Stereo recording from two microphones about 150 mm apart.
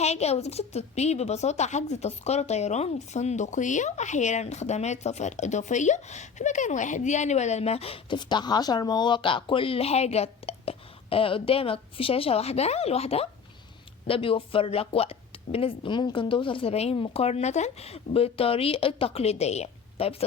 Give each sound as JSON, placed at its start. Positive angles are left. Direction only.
{"t": 0.0, "sound": "a woman's voice", "side_deg": 45}